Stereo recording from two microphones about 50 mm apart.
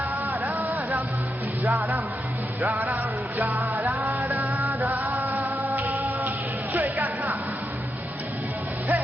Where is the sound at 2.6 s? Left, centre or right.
Right.